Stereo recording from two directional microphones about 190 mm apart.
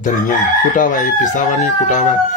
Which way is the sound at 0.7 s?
45° left (ahead or behind).